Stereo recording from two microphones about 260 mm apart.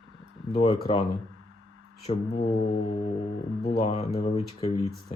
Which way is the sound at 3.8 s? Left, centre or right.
Left.